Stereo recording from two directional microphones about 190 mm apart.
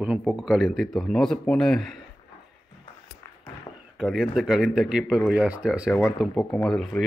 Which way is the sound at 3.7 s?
25° left (ahead or behind).